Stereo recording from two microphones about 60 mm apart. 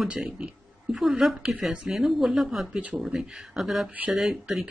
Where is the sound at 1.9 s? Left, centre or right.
Centre.